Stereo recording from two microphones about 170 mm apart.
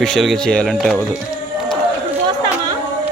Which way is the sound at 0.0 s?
Centre (ahead or behind).